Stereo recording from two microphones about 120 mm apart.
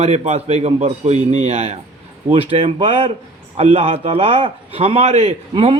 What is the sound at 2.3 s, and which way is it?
A man's voice, 50° right (ahead or behind).